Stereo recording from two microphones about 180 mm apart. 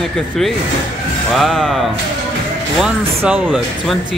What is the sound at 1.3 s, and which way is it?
Speech, centre (ahead or behind).